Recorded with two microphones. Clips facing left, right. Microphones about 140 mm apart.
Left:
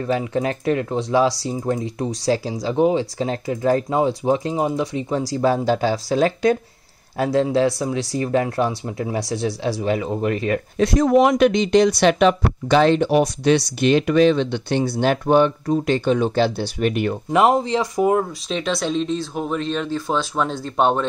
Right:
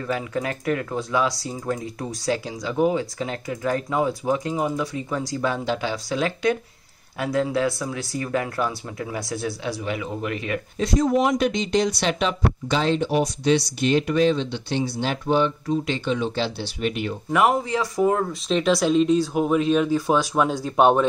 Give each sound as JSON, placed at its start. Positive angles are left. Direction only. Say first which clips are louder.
{"t": 0.0, "sound": "speech", "louder": "left 5 dB", "side_deg": 25}
{"t": 7.2, "sound": "speech", "louder": "left 5 dB", "side_deg": 25}
{"t": 10.8, "sound": "speech", "louder": "left 5 dB", "side_deg": 70}
{"t": 17.3, "sound": "speech", "louder": "left 3 dB", "side_deg": 25}
{"t": 18.5, "sound": "speech", "louder": "right 5 dB", "side_deg": -5}